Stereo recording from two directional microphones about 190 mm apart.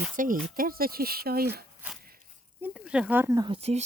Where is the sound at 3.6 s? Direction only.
35° right (ahead or behind).